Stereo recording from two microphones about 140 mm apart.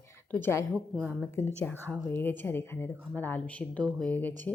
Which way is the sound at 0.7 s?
10° right (ahead or behind).